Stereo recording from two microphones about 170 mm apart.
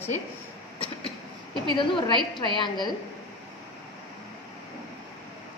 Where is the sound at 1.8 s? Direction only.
30° left (ahead or behind).